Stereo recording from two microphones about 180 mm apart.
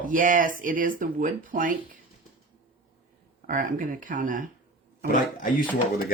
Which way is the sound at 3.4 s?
45° right (ahead or behind).